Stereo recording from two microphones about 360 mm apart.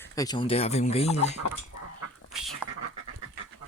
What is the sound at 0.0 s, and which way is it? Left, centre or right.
Speech, centre.